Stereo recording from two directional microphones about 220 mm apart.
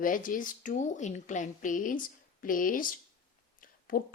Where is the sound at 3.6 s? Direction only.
40° left (ahead or behind).